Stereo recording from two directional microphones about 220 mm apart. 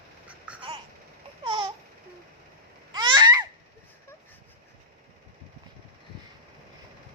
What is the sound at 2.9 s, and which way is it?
Babbling, 20° right (ahead or behind).